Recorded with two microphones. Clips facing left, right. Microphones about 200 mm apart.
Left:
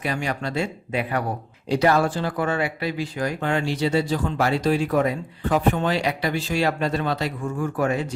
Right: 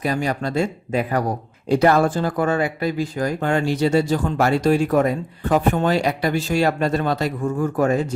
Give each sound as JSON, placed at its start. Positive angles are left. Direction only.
{"t": 0.0, "sound": "speech", "side_deg": -40}